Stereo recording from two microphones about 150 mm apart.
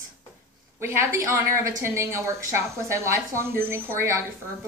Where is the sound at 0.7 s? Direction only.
15° right (ahead or behind).